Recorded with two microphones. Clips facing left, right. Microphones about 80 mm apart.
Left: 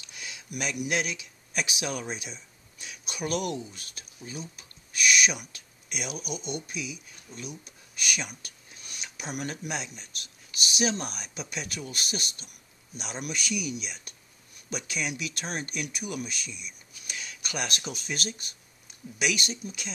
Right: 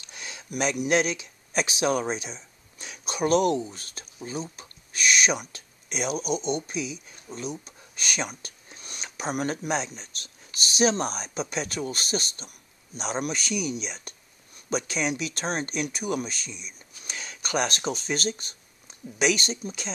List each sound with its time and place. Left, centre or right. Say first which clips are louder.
0.1 s speech: right 4 dB; right